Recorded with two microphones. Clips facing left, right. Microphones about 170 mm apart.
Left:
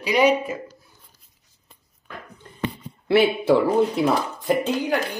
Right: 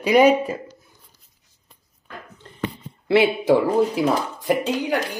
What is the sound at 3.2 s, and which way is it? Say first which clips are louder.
Speech: even; 15° right (ahead or behind).